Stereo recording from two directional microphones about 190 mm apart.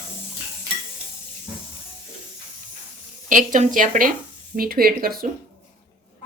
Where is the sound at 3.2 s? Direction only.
45° right (ahead or behind).